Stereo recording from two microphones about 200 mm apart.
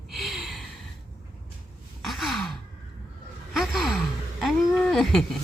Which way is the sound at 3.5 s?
Centre (ahead or behind).